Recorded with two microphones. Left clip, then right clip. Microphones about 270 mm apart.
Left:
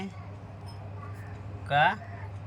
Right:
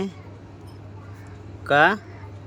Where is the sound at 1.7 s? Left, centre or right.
Centre.